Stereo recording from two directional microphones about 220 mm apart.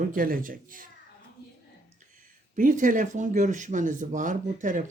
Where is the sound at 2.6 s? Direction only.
35° right (ahead or behind).